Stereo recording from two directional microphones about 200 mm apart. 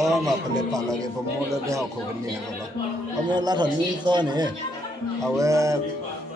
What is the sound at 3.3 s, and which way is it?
A man's voice, 20° right (ahead or behind).